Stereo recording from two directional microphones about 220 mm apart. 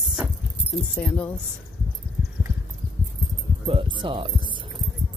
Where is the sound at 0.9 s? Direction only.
5° left (ahead or behind).